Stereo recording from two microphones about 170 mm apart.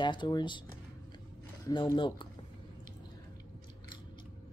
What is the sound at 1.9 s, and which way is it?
Speech, 30° left (ahead or behind).